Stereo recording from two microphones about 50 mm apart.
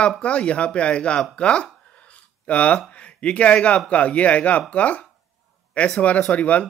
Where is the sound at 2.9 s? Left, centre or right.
Left.